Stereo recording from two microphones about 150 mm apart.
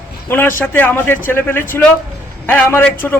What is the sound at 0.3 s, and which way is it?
A woman's voice, 15° left (ahead or behind).